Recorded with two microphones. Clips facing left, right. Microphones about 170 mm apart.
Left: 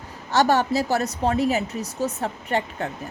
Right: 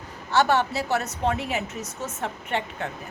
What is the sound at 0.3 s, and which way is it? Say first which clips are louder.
A woman's voice: left 2 dB; 40° left (ahead or behind).